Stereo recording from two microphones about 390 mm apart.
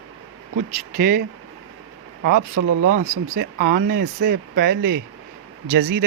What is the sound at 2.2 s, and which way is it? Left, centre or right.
Speech, right.